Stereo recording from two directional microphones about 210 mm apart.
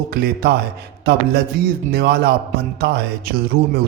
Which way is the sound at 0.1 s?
45° right (ahead or behind).